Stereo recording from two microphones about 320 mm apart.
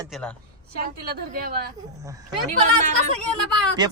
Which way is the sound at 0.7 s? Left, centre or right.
Right.